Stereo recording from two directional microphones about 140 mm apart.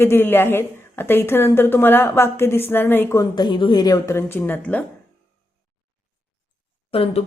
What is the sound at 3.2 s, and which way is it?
Speech, 30° left (ahead or behind).